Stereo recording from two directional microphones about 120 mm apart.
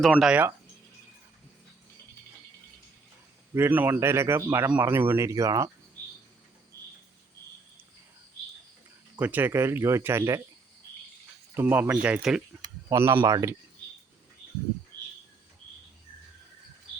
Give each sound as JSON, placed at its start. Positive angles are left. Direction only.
{"t": 0.0, "sound": "speech", "side_deg": 5}
{"t": 3.5, "sound": "a man's voice", "side_deg": -20}
{"t": 9.1, "sound": "a man's voice", "side_deg": -15}
{"t": 11.5, "sound": "speech", "side_deg": -15}
{"t": 12.9, "sound": "a man's voice", "side_deg": -25}